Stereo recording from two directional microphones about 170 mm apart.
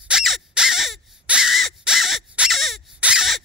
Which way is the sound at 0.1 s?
5° right (ahead or behind).